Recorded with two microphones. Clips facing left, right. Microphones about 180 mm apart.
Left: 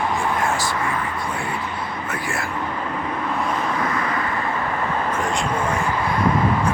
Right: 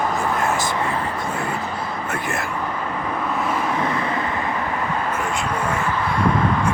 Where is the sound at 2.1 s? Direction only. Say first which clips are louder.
Right 1 dB; 20° right (ahead or behind).